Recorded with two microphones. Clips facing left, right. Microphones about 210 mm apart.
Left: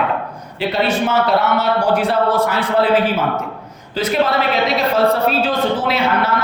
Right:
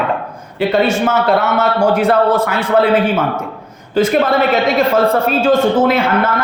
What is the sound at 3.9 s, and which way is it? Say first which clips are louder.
Speech: right 5 dB; 50° right (ahead or behind).